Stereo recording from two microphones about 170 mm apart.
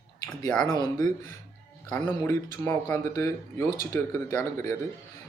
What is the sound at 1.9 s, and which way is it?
Speech, 15° left (ahead or behind).